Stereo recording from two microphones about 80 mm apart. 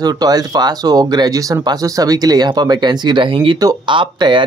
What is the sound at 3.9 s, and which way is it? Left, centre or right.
Speech, right.